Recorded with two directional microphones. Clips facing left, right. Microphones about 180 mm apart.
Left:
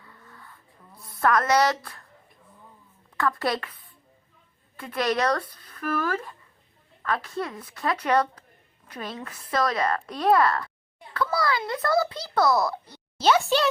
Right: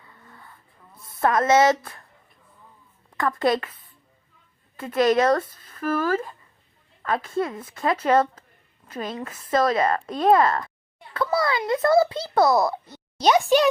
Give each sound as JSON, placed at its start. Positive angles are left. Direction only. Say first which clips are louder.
{"t": 0.0, "sound": "a sound", "louder": "right 1 dB", "side_deg": -20}
{"t": 1.0, "sound": "a child's voice", "louder": "right 2 dB", "side_deg": -25}
{"t": 3.2, "sound": "a child's voice", "louder": "right 4 dB", "side_deg": -20}
{"t": 4.8, "sound": "a child's voice", "louder": "right 6 dB", "side_deg": -25}